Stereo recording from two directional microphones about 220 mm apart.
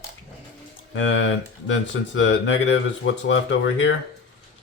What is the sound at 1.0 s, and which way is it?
Speech, 60° left (ahead or behind).